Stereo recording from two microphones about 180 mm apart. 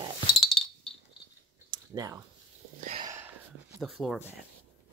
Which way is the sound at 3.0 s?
15° right (ahead or behind).